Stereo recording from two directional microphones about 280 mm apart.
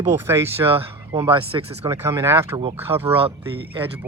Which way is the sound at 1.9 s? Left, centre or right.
Centre.